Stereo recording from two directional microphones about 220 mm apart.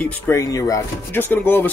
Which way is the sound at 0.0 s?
10° left (ahead or behind).